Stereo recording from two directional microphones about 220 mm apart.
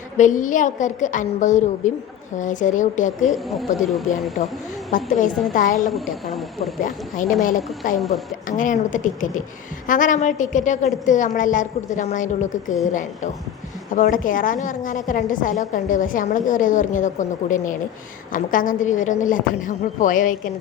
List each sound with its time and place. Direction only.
0.2 s a woman's voice: 35° left (ahead or behind)
3.2 s speech: centre (ahead or behind)
4.9 s a woman's voice: 35° left (ahead or behind)